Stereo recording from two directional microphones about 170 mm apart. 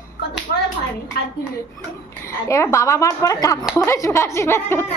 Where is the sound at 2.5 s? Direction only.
15° left (ahead or behind).